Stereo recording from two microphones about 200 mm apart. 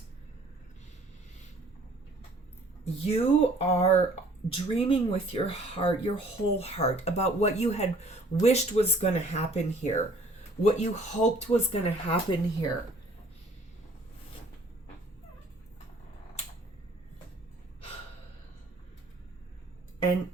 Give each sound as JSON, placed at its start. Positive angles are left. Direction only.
{"t": 2.8, "sound": "speech", "side_deg": 30}